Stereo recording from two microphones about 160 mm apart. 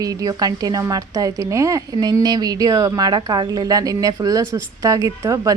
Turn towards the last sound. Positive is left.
turn(degrees=-20)  # may be behind; listen again after turning